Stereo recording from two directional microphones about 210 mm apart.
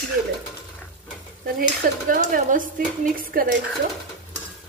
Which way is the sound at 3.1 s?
45° right (ahead or behind).